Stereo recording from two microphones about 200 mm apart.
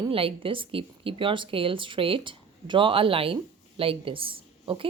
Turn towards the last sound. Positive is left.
turn(degrees=-25)  # may be behind; listen again after turning